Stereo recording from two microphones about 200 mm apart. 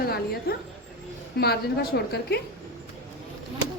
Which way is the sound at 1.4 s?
50° left (ahead or behind).